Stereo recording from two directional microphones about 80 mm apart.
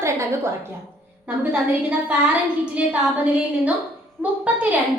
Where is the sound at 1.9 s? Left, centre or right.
Centre.